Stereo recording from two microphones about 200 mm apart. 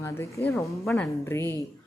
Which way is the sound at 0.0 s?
15° left (ahead or behind).